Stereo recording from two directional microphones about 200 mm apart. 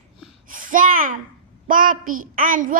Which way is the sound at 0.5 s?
40° right (ahead or behind).